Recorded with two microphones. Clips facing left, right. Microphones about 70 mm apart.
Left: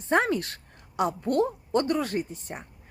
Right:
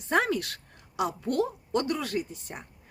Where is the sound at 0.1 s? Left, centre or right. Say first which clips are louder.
Left 2 dB; left.